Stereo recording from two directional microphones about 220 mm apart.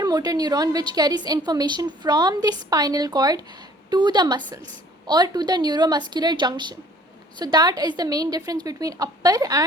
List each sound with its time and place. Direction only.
0.0 s a woman's voice: 15° right (ahead or behind)